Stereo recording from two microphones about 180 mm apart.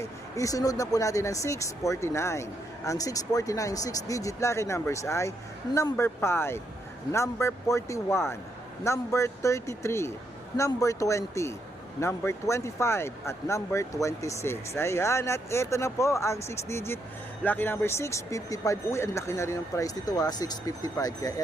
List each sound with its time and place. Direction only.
0.0 s speech: 20° left (ahead or behind)